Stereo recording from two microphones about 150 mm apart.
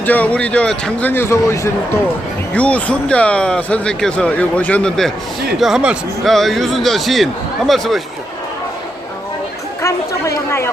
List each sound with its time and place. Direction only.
0.0 s a man's voice: 10° left (ahead or behind)
9.8 s a woman's voice: 20° left (ahead or behind)